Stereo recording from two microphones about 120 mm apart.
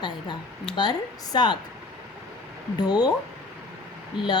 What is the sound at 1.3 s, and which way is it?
Speech, 35° left (ahead or behind).